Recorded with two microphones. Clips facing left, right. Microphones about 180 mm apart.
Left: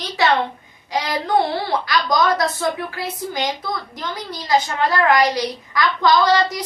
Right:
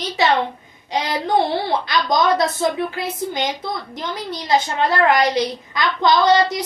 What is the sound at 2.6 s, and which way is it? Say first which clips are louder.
A woman's voice: right 3 dB; 20° right (ahead or behind).